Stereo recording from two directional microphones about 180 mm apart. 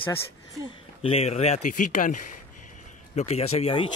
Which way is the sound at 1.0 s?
35° left (ahead or behind).